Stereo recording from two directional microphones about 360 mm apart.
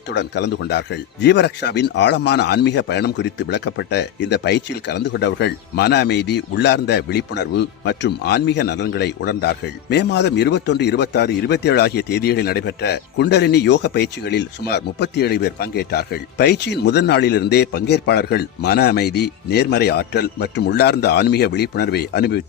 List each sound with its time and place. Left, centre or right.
0.1 s speech: left